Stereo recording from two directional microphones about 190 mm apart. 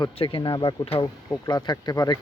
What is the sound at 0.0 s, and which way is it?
Speech, 25° left (ahead or behind).